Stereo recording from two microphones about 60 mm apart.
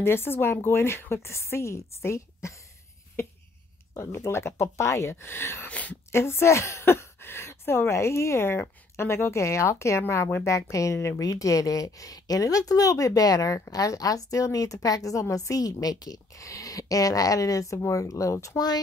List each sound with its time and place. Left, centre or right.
0.0 s a woman's voice: left
3.9 s a woman's voice: left
5.7 s a woman's voice: left
6.1 s a woman's voice: left
10.5 s speech: left
11.2 s a woman's voice: left